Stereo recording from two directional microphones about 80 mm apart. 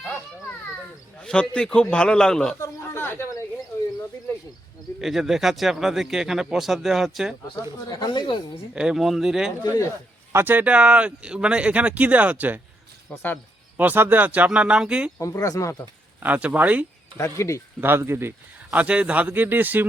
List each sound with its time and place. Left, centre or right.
1.2 s a man's voice: centre
2.6 s a sound: left
4.9 s speech: centre
7.9 s speech: left
8.7 s speech: centre
10.3 s speech: right
13.7 s speech: right
15.2 s speech: left
16.2 s speech: centre
17.2 s speech: left
17.7 s a man's voice: right
18.8 s speech: centre